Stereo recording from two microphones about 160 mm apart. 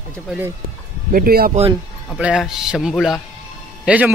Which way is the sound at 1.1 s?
70° right (ahead or behind).